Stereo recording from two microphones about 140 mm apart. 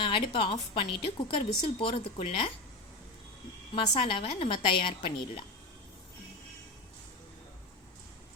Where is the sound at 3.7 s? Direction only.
40° left (ahead or behind).